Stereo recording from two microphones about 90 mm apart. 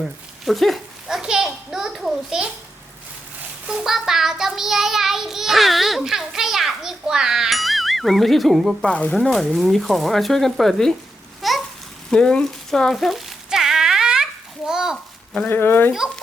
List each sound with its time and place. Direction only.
0.0 s a child's voice: centre (ahead or behind)
3.7 s child singing: 5° right (ahead or behind)
8.8 s speech: 15° left (ahead or behind)
9.1 s child singing: centre (ahead or behind)
11.4 s babbling: centre (ahead or behind)
12.1 s a sound: 10° left (ahead or behind); by 14.3 s 10° right (ahead or behind)
14.7 s a child's voice: 5° right (ahead or behind)
15.4 s speech: 20° left (ahead or behind)